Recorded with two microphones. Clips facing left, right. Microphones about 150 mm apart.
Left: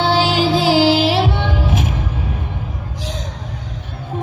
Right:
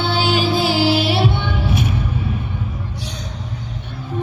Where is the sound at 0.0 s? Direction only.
90° left.